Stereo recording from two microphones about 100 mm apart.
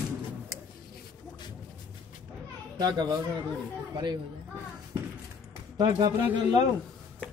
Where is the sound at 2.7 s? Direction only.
45° right (ahead or behind).